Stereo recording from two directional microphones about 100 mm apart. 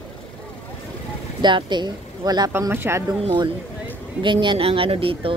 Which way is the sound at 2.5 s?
25° right (ahead or behind).